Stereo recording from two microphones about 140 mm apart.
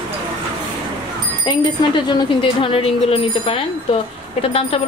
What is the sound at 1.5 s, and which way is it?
A woman's voice, 35° left (ahead or behind).